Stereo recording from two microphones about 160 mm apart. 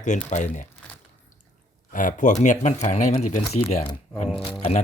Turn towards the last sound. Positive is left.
turn(degrees=40)  # may be behind; listen again after turning